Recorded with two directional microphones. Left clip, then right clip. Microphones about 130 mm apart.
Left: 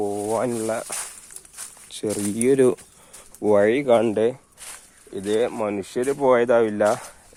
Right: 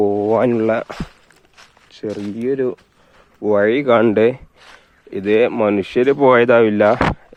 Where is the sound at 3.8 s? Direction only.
35° right (ahead or behind).